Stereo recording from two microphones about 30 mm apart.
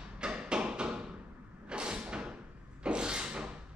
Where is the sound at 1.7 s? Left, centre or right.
Right.